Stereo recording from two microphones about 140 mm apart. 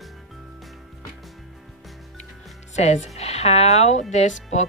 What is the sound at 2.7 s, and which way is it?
Speech, 55° left (ahead or behind).